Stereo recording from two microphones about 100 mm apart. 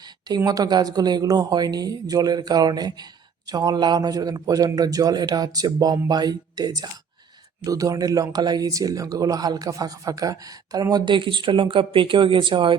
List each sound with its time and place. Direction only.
0.0 s speech: 40° right (ahead or behind)